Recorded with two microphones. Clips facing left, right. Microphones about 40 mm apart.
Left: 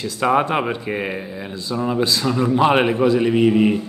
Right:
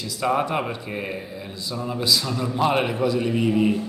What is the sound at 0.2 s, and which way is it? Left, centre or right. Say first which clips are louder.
A man's voice: left 5 dB; left.